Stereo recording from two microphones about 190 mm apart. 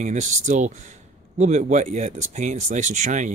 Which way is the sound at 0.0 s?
40° right (ahead or behind).